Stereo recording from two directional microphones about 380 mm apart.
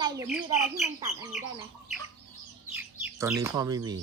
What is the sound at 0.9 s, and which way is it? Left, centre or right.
Speech, centre.